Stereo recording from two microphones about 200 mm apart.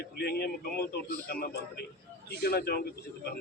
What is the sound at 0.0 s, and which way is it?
A man's voice, 50° left (ahead or behind).